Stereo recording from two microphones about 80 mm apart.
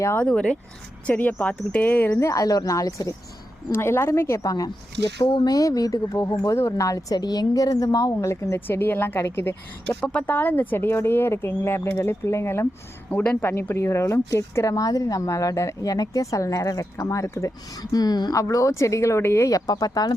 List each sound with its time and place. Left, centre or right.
0.3 s speech: centre
1.0 s speech: left
2.2 s a woman's voice: left
3.7 s speech: left
5.1 s speech: left
5.5 s a woman's voice: left
6.5 s a woman's voice: left
8.1 s speech: left
10.0 s speech: centre; by 12.6 s left
13.1 s speech: centre; by 17.5 s left
17.9 s a woman's voice: left
18.4 s speech: left